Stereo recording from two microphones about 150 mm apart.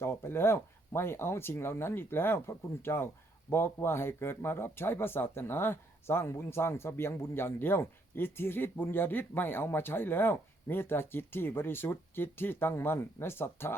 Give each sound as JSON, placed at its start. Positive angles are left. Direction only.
{"t": 0.0, "sound": "speech", "side_deg": 15}